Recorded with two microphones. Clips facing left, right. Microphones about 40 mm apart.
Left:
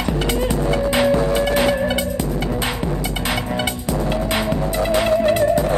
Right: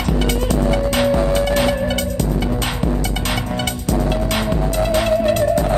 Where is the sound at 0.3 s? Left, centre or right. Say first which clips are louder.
Even; left.